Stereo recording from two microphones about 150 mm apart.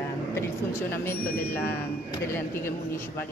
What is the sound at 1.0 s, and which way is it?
Speech, 15° left (ahead or behind).